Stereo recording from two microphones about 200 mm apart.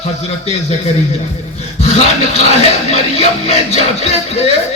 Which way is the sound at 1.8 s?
30° left (ahead or behind).